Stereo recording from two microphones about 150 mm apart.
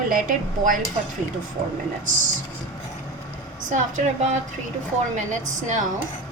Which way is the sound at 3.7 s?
55° right (ahead or behind).